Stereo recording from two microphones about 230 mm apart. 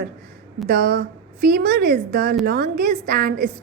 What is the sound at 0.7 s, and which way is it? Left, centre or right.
A woman's voice, right.